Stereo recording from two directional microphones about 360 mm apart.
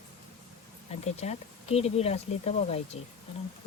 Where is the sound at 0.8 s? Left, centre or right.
Centre.